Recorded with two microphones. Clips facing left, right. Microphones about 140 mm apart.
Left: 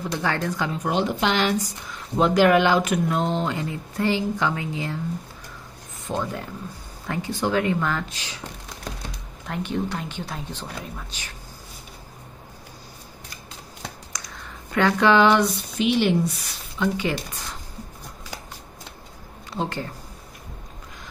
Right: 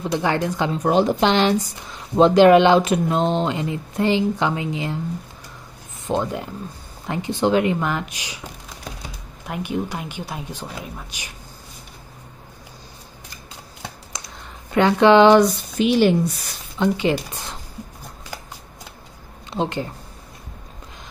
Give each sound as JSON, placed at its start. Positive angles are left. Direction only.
{"t": 0.0, "sound": "speech", "side_deg": -20}
{"t": 0.8, "sound": "speech", "side_deg": -40}
{"t": 6.0, "sound": "speech", "side_deg": -20}
{"t": 9.5, "sound": "speech", "side_deg": -10}
{"t": 14.1, "sound": "a sound", "side_deg": -25}
{"t": 14.7, "sound": "speech", "side_deg": -20}
{"t": 15.2, "sound": "speech", "side_deg": -40}
{"t": 16.8, "sound": "speech", "side_deg": -25}
{"t": 19.5, "sound": "speech", "side_deg": -20}